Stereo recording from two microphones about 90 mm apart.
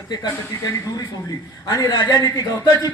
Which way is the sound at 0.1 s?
50° left (ahead or behind).